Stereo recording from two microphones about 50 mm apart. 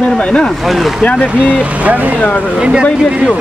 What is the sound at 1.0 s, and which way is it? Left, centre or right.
Speech, left.